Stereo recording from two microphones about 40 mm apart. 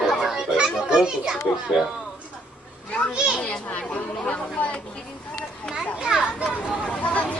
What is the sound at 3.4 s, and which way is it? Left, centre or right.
A child's voice, left.